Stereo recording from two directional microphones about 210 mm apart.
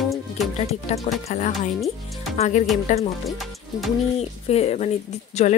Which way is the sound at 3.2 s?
Centre (ahead or behind).